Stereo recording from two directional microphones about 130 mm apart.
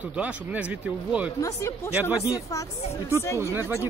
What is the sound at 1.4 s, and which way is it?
Speech, 20° left (ahead or behind).